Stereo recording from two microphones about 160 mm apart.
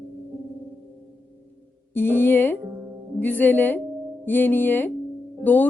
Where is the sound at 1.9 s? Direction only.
15° left (ahead or behind).